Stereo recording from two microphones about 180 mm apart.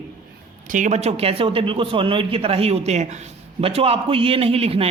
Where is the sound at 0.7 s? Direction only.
45° right (ahead or behind).